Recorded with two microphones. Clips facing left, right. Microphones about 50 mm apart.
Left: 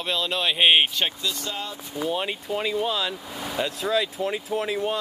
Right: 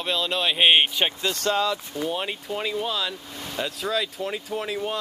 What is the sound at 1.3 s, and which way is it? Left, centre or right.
Speech, right.